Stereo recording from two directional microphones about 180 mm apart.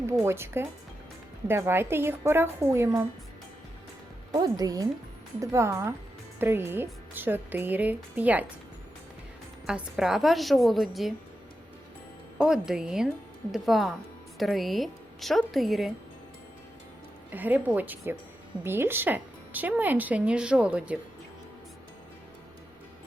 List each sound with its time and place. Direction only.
0.1 s speech: 15° right (ahead or behind)
4.3 s a woman's voice: 25° right (ahead or behind)
9.6 s a woman's voice: 5° right (ahead or behind)
12.4 s a woman's voice: 5° right (ahead or behind)
17.3 s speech: 10° right (ahead or behind)